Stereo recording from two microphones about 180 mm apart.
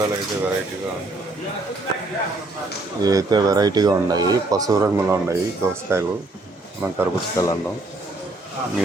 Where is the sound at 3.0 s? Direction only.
20° right (ahead or behind).